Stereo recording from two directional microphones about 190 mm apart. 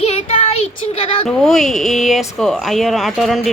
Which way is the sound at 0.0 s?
35° left (ahead or behind).